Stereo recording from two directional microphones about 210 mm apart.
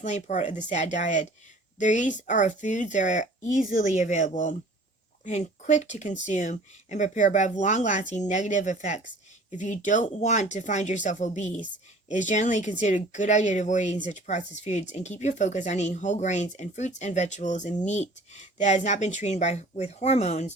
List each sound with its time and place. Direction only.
0.0 s speech: 35° left (ahead or behind)